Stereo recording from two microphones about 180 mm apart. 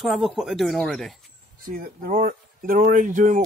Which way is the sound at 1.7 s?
50° right (ahead or behind).